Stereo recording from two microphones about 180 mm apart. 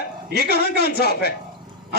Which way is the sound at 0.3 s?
60° left (ahead or behind).